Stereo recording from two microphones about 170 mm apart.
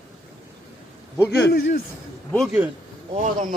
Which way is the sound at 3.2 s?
45° right (ahead or behind).